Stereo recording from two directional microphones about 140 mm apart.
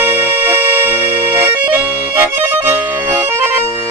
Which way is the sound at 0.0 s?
15° right (ahead or behind).